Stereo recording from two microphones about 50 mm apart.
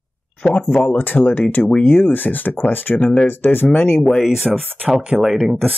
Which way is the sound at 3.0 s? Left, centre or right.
Left.